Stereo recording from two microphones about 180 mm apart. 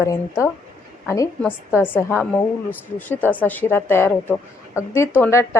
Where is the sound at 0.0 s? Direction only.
15° left (ahead or behind).